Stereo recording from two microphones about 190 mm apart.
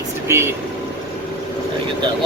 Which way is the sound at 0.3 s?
15° right (ahead or behind).